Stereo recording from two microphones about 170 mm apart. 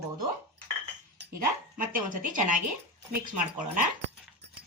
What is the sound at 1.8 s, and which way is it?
Speech, 50° right (ahead or behind).